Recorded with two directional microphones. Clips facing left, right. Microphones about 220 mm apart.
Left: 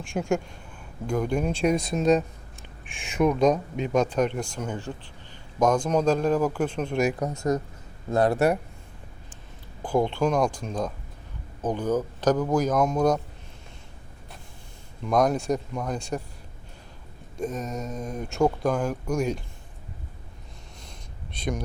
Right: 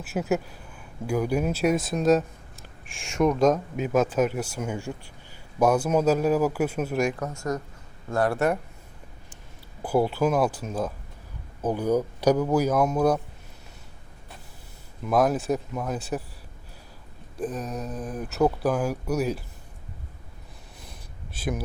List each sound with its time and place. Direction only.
0.0 s a man's voice: 5° right (ahead or behind)
7.1 s speech: 15° left (ahead or behind)
9.8 s a man's voice: 5° right (ahead or behind)
15.0 s speech: 5° right (ahead or behind)
17.3 s speech: centre (ahead or behind)
21.3 s speech: 5° right (ahead or behind)